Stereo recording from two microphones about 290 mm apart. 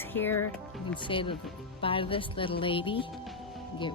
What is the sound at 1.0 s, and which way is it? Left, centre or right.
Speech, centre.